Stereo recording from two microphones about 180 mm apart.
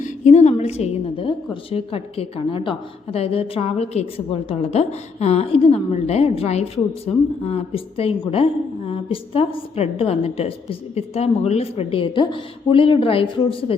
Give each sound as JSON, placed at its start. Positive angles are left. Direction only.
{"t": 0.0, "sound": "a woman's voice", "side_deg": 40}